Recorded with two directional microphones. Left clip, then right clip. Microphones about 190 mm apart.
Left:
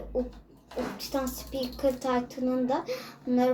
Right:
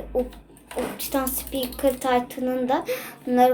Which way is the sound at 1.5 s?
Centre (ahead or behind).